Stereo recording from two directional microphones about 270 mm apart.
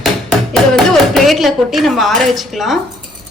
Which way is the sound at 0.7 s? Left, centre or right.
Centre.